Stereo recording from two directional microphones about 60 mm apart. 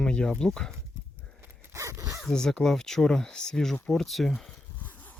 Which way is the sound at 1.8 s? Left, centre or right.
Right.